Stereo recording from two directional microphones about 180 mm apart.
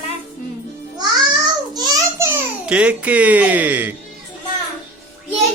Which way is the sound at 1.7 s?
20° right (ahead or behind).